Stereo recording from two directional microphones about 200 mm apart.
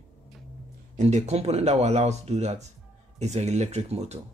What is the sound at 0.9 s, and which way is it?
Speech, 35° right (ahead or behind).